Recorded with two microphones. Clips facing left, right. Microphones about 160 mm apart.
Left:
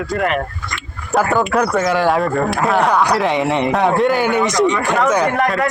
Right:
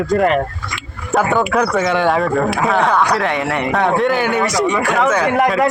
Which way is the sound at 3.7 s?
Centre (ahead or behind).